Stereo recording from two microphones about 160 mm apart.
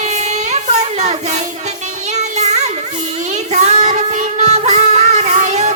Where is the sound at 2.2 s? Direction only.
45° right (ahead or behind).